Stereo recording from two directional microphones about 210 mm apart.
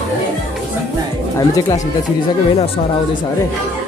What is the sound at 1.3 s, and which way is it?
Speech, 15° left (ahead or behind).